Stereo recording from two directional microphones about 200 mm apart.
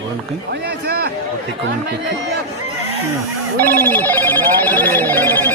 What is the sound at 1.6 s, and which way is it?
Speech, 60° right (ahead or behind).